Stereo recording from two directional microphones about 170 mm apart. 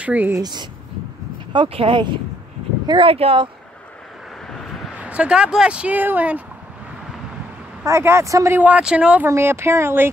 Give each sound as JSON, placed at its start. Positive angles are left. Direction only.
{"t": 0.0, "sound": "speech", "side_deg": -10}
{"t": 0.4, "sound": "speech", "side_deg": -25}
{"t": 4.5, "sound": "speech", "side_deg": 0}
{"t": 7.8, "sound": "speech", "side_deg": -15}